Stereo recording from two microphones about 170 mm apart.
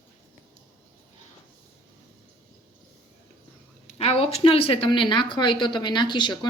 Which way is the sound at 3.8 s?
35° left (ahead or behind).